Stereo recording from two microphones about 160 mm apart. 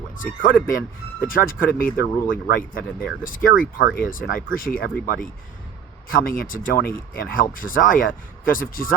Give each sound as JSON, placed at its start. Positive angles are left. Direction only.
{"t": 0.2, "sound": "speech", "side_deg": 60}